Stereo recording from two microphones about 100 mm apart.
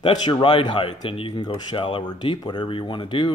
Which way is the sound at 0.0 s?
45° left (ahead or behind).